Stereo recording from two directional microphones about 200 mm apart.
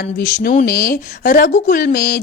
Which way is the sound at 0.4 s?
45° left (ahead or behind).